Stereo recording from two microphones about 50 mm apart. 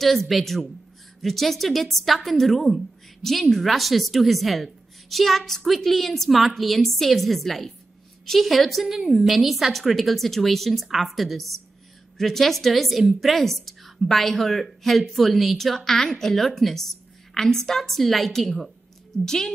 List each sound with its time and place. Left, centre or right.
0.0 s a woman's voice: centre